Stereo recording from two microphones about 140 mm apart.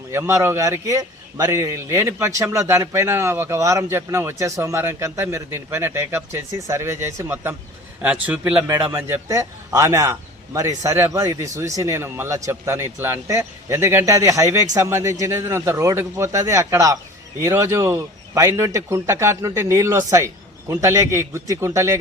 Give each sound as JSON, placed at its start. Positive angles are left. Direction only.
{"t": 0.1, "sound": "a man's voice", "side_deg": -20}